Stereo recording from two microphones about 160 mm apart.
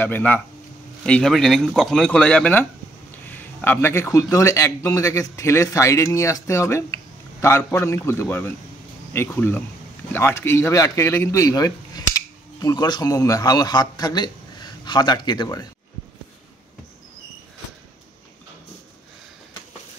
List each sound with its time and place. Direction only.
0.0 s a man's voice: 10° left (ahead or behind)